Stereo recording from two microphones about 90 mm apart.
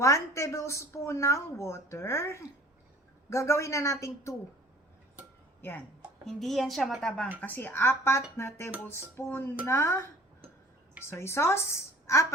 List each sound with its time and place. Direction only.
0.0 s speech: 35° left (ahead or behind)
6.2 s a woman's voice: centre (ahead or behind)
7.4 s speech: 20° left (ahead or behind)
11.1 s speech: 30° left (ahead or behind)